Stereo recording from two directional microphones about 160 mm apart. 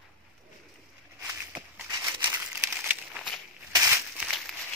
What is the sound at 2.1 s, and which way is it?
Crumpling, 15° right (ahead or behind).